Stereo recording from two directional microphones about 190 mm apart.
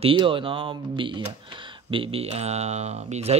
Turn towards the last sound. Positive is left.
turn(degrees=-35)  # may be behind; listen again after turning